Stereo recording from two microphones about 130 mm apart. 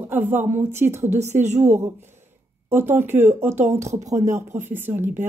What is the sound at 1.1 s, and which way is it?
Speech, 60° right (ahead or behind).